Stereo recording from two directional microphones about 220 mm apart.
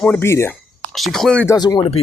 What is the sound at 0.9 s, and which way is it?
Speech, centre (ahead or behind).